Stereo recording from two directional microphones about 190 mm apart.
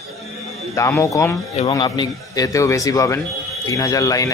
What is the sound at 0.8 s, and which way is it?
Speech, 15° left (ahead or behind).